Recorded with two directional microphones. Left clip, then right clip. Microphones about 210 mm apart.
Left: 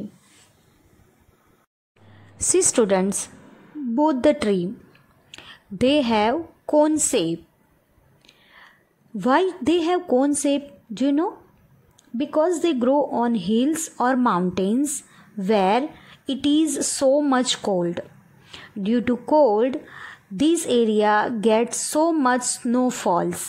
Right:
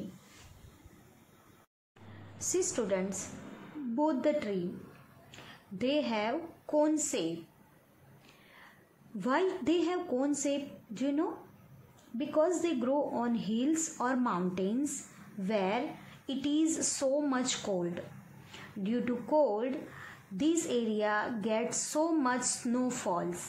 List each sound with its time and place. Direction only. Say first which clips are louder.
2.5 s a woman's voice: left 13 dB; 50° left (ahead or behind)
9.2 s a woman's voice: left 11 dB; 45° left (ahead or behind)